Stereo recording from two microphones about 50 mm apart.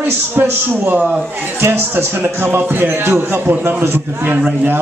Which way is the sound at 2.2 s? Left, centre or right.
Right.